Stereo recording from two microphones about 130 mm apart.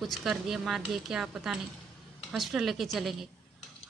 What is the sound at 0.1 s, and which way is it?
Speech, centre (ahead or behind).